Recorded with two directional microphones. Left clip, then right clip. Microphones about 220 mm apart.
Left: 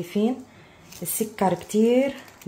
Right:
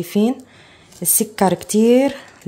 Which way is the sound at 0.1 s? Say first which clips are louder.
Right 6 dB; 50° right (ahead or behind).